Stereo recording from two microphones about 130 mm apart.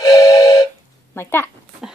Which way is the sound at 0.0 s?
30° left (ahead or behind).